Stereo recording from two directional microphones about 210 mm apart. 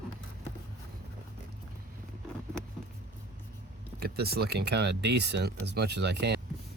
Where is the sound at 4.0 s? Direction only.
50° right (ahead or behind).